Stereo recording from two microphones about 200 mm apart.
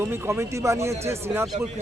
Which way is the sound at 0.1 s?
15° right (ahead or behind).